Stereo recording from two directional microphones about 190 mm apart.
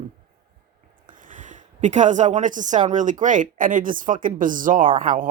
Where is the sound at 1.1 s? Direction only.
45° right (ahead or behind).